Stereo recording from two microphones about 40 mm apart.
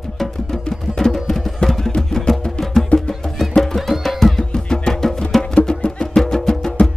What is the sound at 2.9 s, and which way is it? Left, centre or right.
Music, left.